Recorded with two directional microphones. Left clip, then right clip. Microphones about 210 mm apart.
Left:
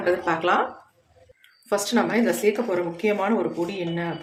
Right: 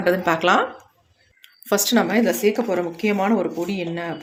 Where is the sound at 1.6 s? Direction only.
45° right (ahead or behind).